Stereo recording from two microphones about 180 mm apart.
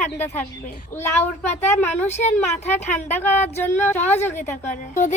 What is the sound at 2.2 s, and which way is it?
Speech, 10° left (ahead or behind).